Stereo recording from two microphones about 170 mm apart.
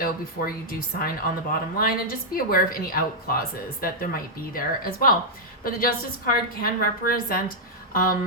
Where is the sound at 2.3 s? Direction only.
60° left (ahead or behind).